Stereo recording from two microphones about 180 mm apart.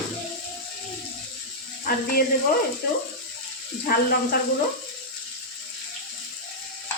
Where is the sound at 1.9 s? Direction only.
50° left (ahead or behind).